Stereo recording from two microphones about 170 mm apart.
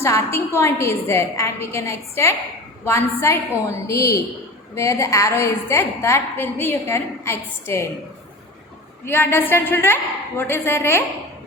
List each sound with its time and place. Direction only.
0.0 s a woman's voice: 15° left (ahead or behind)
9.0 s a woman's voice: 15° left (ahead or behind)